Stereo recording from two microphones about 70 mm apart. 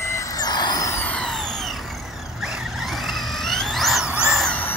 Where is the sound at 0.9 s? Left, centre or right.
Left.